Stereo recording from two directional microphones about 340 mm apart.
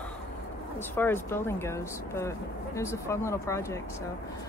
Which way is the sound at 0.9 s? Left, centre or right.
Centre.